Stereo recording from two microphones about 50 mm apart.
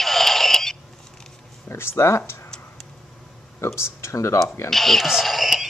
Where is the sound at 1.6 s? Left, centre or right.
Left.